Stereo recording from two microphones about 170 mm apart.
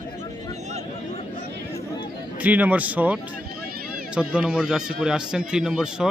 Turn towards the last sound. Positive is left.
turn(degrees=0)  # may be behind; listen again after turning